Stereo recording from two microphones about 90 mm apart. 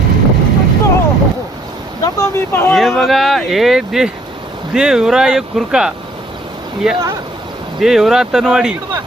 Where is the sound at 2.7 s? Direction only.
Centre (ahead or behind).